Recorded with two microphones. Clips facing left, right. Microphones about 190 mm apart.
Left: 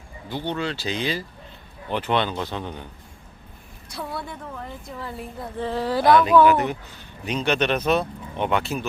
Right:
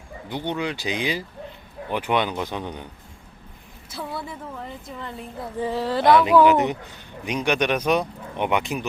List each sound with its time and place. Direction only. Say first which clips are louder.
0.3 s speech: even; 15° right (ahead or behind)
3.8 s a woman's voice: even; centre (ahead or behind)
5.5 s speech: right 1 dB; 10° right (ahead or behind)
5.8 s a woman's voice: even; centre (ahead or behind)
6.1 s speech: even; 20° right (ahead or behind)